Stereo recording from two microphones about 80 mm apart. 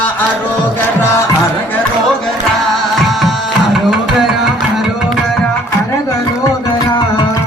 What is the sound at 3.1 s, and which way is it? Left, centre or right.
Tabla, centre.